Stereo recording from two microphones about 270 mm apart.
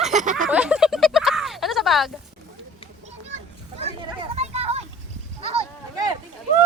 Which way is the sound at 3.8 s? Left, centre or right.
Right.